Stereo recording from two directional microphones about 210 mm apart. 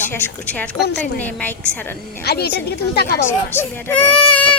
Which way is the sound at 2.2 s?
50° left (ahead or behind).